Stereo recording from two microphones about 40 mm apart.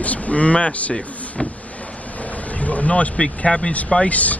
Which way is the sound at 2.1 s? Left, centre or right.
Left.